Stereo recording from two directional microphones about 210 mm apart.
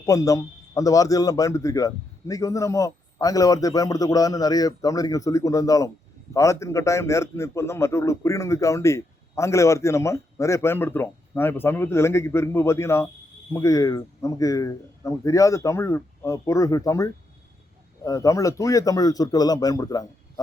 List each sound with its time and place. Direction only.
0.0 s a man's voice: 15° left (ahead or behind)